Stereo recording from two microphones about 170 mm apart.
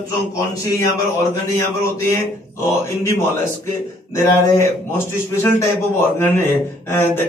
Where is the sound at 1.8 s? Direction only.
15° left (ahead or behind).